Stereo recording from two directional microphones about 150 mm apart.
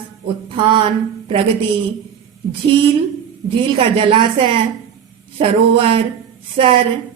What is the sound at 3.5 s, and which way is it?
Speech, 35° right (ahead or behind).